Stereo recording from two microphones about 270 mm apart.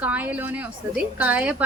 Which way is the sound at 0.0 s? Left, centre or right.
Centre.